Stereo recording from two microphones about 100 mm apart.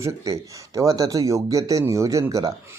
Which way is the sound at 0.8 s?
35° right (ahead or behind).